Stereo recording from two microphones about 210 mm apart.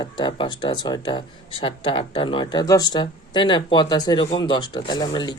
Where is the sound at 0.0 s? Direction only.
20° left (ahead or behind).